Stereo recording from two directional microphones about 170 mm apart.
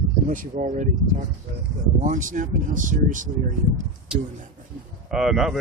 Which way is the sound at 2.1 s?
50° right (ahead or behind).